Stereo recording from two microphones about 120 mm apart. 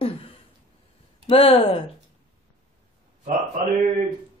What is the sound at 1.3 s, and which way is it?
Speech, 50° left (ahead or behind).